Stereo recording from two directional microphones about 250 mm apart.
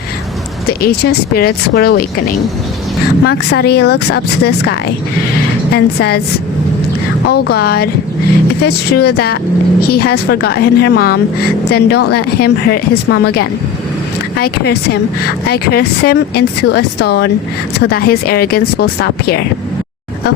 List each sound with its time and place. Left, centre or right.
0.7 s speech: left
7.3 s speech: left